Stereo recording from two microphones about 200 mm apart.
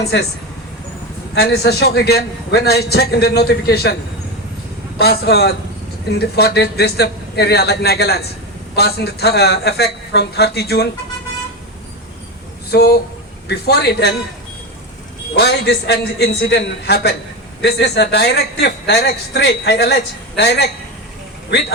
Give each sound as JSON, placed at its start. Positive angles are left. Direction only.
{"t": 1.4, "sound": "a man's voice", "side_deg": 55}
{"t": 4.9, "sound": "a man's voice", "side_deg": 55}
{"t": 12.7, "sound": "a man's voice", "side_deg": 55}
{"t": 15.4, "sound": "a man's voice", "side_deg": 55}